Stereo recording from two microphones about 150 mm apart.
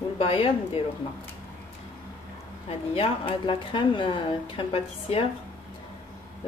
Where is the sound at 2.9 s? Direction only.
40° left (ahead or behind).